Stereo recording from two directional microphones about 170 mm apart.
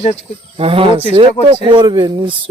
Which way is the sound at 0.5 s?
30° right (ahead or behind).